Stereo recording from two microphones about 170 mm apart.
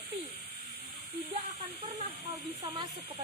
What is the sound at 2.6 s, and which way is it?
Speech, 25° right (ahead or behind).